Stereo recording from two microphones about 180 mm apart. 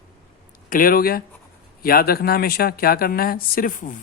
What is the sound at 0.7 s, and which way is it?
Speech, 50° left (ahead or behind).